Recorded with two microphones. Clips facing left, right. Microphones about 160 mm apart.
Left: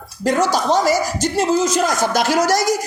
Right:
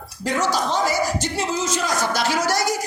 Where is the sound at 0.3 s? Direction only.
40° left (ahead or behind).